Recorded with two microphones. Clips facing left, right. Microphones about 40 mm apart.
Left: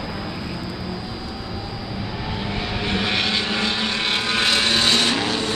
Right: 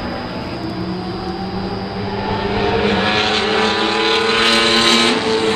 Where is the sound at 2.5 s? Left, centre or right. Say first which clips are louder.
Right 9 dB; right.